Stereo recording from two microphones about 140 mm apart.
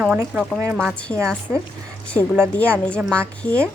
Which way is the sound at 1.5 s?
10° right (ahead or behind).